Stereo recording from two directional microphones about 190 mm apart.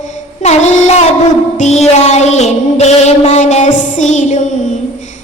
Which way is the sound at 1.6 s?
35° left (ahead or behind).